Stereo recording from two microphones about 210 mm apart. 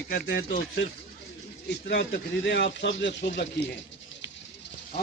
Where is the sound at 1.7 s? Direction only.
55° left (ahead or behind).